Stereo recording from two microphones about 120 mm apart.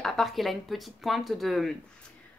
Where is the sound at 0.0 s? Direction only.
Centre (ahead or behind).